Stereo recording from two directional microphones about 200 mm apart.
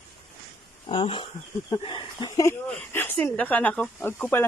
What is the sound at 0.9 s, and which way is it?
Speech, 25° left (ahead or behind).